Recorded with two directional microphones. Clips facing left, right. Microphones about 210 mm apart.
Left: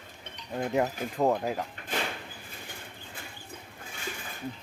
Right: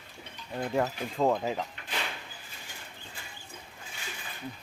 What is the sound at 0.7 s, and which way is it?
Speech, 15° left (ahead or behind).